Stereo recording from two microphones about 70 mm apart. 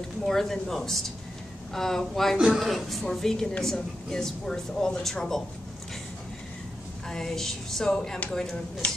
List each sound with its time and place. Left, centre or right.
0.2 s a woman's voice: centre
7.1 s speech: centre
8.8 s speech: centre